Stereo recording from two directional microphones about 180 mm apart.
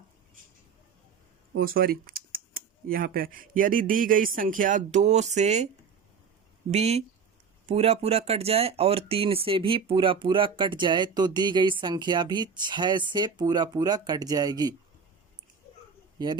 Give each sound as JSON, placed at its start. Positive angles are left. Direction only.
{"t": 1.5, "sound": "speech", "side_deg": -55}
{"t": 6.7, "sound": "speech", "side_deg": -35}
{"t": 16.1, "sound": "speech", "side_deg": -25}